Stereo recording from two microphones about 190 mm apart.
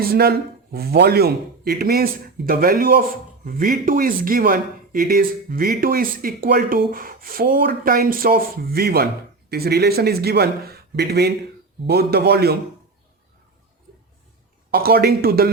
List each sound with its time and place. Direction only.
0.0 s speech: 55° right (ahead or behind)
14.7 s speech: 55° right (ahead or behind)